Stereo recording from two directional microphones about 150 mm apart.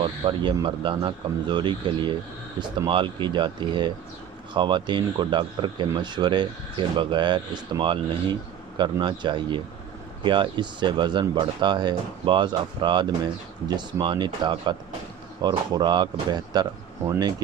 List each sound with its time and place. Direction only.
0.0 s speech: 35° right (ahead or behind)